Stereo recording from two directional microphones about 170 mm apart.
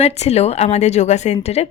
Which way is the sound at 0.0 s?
40° left (ahead or behind).